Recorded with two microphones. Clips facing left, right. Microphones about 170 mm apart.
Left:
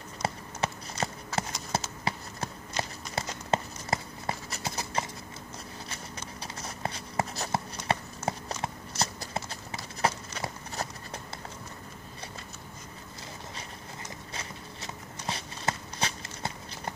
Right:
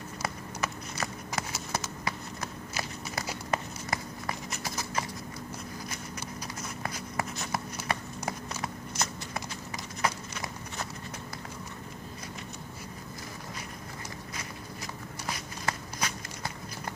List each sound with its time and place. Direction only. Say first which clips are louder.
0.2 s run: left 3 dB; 30° left (ahead or behind)
1.7 s a sound: left 2 dB; 30° left (ahead or behind)
3.5 s clip-clop: left 4 dB; 25° left (ahead or behind)
6.4 s writing: left 4 dB; 30° left (ahead or behind)
7.9 s clip-clop: left 4 dB; 30° left (ahead or behind)
14.3 s walk: right 1 dB; 30° left (ahead or behind)